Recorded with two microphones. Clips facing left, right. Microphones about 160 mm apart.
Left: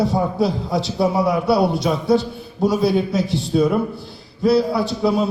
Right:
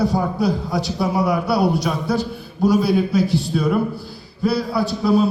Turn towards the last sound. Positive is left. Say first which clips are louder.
# left 2 dB
turn(degrees=25)  # may be behind; listen again after turning